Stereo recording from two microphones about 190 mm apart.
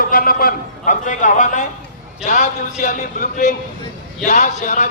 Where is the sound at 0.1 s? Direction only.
50° left (ahead or behind).